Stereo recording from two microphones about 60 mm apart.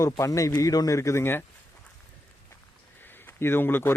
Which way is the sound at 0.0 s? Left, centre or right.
Left.